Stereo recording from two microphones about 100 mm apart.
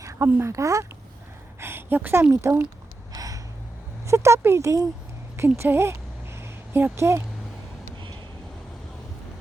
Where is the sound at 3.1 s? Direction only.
35° right (ahead or behind).